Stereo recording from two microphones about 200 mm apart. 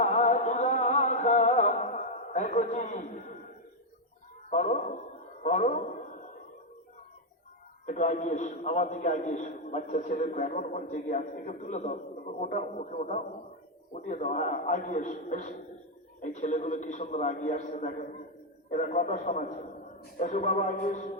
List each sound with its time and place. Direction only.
0.0 s music: 35° left (ahead or behind)
4.4 s a man's voice: 35° left (ahead or behind)
5.4 s a sound: 40° left (ahead or behind)
7.9 s a man's voice: 35° left (ahead or behind)